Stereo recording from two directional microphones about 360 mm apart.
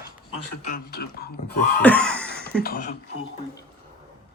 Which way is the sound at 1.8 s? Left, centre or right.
Centre.